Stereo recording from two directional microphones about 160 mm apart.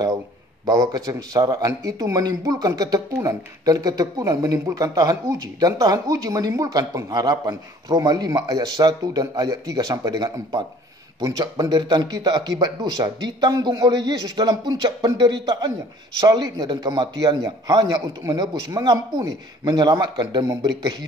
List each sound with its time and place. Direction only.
0.7 s speech: 20° right (ahead or behind)